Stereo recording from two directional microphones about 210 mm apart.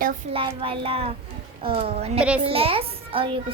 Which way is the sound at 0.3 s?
25° right (ahead or behind).